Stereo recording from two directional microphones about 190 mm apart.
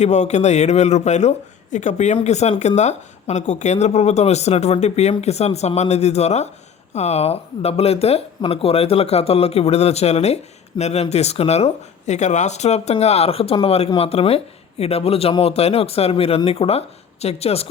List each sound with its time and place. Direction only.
0.0 s speech: 35° left (ahead or behind)